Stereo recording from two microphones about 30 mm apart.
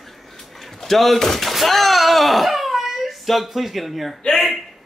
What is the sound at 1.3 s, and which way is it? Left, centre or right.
Wail, centre.